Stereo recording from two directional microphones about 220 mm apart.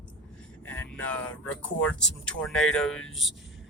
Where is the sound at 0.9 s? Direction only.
5° left (ahead or behind).